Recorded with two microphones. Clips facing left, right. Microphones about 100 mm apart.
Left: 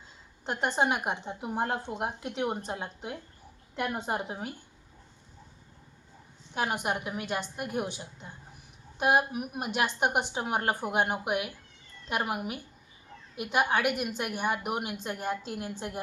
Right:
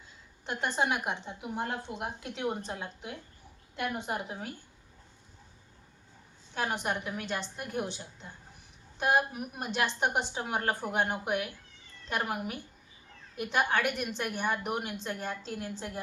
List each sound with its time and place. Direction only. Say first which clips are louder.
0.8 s a woman's voice: left 2 dB; 25° left (ahead or behind)
1.3 s a woman's voice: left 4 dB; 40° left (ahead or behind)
2.0 s a woman's voice: left 4 dB; 25° left (ahead or behind)
6.5 s a woman's voice: left 2 dB; 15° left (ahead or behind)